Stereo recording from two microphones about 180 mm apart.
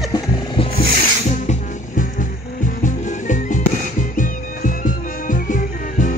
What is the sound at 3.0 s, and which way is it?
Music, 45° left (ahead or behind).